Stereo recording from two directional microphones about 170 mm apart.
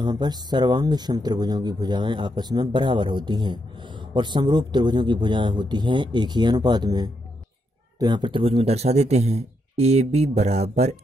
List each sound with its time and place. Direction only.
0.0 s speech: 25° right (ahead or behind); by 11.0 s 40° right (ahead or behind)